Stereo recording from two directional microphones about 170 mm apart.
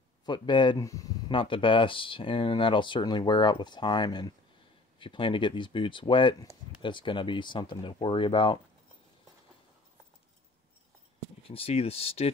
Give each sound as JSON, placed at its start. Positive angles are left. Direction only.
{"t": 0.2, "sound": "speech", "side_deg": 25}
{"t": 11.4, "sound": "speech", "side_deg": 35}